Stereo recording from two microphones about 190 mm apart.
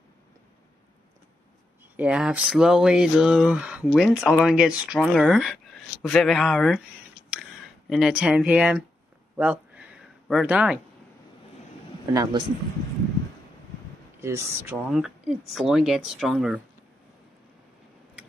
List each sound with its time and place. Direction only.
2.0 s speech: 5° right (ahead or behind)
7.9 s speech: 5° right (ahead or behind)
9.4 s a sound: 5° right (ahead or behind)
12.1 s speech: 20° right (ahead or behind)
14.2 s speech: 10° right (ahead or behind)